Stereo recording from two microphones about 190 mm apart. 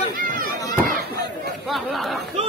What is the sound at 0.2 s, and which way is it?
Chop, 45° right (ahead or behind).